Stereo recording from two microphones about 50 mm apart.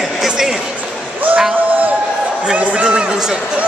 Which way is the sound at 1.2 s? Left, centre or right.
Right.